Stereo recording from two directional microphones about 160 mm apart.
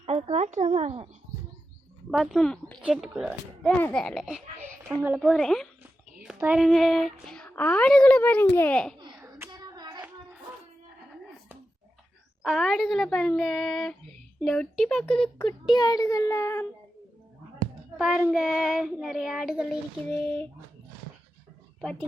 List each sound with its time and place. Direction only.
0.0 s speech: 40° right (ahead or behind)
2.0 s child singing: centre (ahead or behind)
3.8 s speech: 15° left (ahead or behind)
4.0 s child singing: centre (ahead or behind)
6.6 s speech: centre (ahead or behind)
9.3 s hands: 25° right (ahead or behind)
12.4 s child singing: centre (ahead or behind)
15.4 s a child's voice: 30° left (ahead or behind)
17.9 s child singing: 5° right (ahead or behind)
20.1 s speech: 10° left (ahead or behind)